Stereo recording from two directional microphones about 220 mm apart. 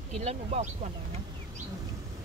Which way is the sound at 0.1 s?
30° right (ahead or behind).